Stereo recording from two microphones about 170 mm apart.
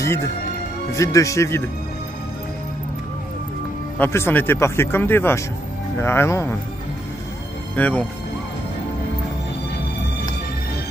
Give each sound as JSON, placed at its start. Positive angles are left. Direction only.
{"t": 0.9, "sound": "speech", "side_deg": 20}
{"t": 4.0, "sound": "speech", "side_deg": 15}
{"t": 7.7, "sound": "speech", "side_deg": 10}